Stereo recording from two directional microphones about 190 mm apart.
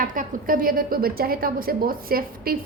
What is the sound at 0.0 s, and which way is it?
A woman's voice, 45° right (ahead or behind).